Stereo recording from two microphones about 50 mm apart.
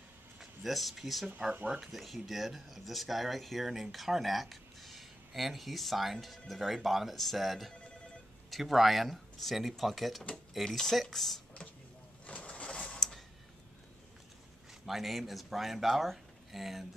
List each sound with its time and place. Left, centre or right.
0.4 s speech: centre
1.5 s speech: right
1.8 s speech: centre
12.3 s vehicle: left
14.9 s speech: centre